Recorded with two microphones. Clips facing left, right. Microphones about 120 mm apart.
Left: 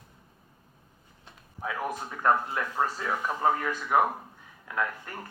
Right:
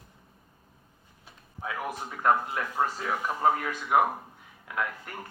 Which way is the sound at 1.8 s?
15° right (ahead or behind).